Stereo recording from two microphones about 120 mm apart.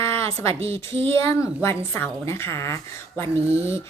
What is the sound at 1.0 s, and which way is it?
A woman's voice, 25° left (ahead or behind).